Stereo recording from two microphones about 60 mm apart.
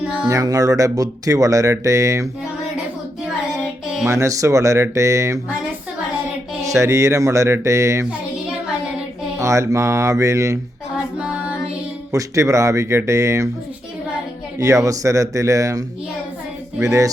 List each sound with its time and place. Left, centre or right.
0.3 s speech: right
4.0 s speech: right
6.7 s speech: right
9.4 s speech: right
10.9 s music: centre
12.1 s speech: right
14.6 s speech: right
16.8 s speech: right